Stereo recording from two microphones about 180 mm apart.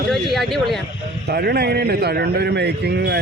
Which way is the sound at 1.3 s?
60° right (ahead or behind).